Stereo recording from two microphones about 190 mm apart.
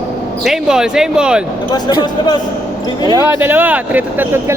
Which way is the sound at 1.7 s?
20° left (ahead or behind).